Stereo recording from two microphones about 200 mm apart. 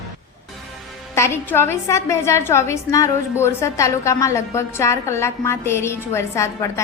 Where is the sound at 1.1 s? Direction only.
10° left (ahead or behind).